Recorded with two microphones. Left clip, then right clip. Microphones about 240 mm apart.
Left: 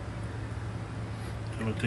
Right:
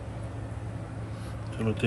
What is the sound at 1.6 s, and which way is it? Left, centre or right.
Speech, centre.